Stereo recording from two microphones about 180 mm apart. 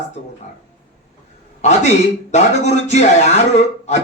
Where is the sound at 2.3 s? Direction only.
40° left (ahead or behind).